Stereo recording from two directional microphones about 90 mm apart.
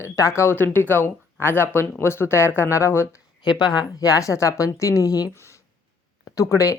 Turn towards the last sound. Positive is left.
turn(degrees=35)  # may be behind; listen again after turning